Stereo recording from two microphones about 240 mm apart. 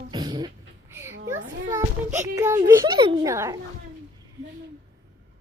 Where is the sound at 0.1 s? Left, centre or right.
Centre.